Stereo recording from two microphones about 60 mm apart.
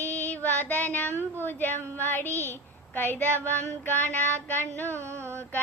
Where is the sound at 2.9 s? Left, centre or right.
Left.